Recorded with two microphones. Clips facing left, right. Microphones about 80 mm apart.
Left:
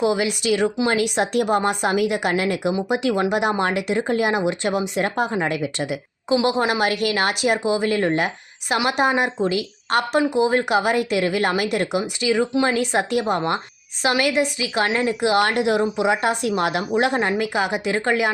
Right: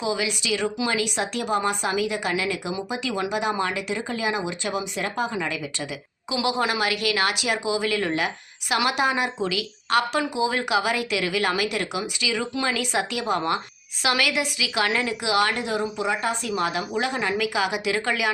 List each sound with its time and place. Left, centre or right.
0.0 s speech: left
6.3 s a woman's voice: left
15.5 s speech: left
17.2 s a woman's voice: left